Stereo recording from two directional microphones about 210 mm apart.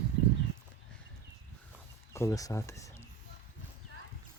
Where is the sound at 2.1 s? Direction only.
15° left (ahead or behind).